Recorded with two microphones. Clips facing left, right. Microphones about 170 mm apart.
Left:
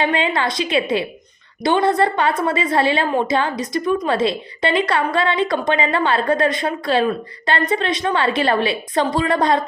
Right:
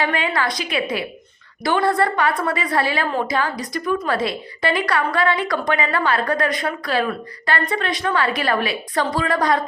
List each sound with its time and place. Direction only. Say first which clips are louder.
0.0 s a woman's voice: left 2 dB; 25° left (ahead or behind)